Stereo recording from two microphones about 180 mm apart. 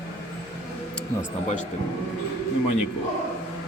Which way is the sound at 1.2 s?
40° left (ahead or behind).